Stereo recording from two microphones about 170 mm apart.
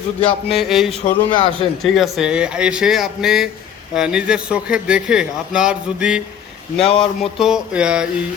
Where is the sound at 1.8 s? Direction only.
Centre (ahead or behind).